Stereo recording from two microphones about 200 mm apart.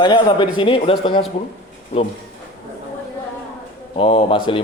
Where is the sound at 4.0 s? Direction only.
30° left (ahead or behind).